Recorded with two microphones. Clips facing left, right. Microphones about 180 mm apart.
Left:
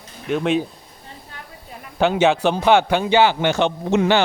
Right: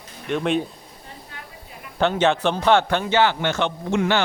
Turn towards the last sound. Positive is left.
turn(degrees=20)  # may be behind; listen again after turning